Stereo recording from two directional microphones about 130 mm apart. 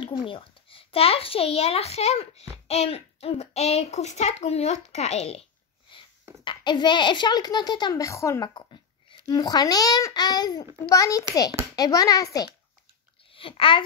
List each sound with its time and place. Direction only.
0.3 s a child's voice: 45° left (ahead or behind); by 8.5 s 25° left (ahead or behind)
8.5 s a child's voice: 40° left (ahead or behind)
13.3 s speech: 45° left (ahead or behind)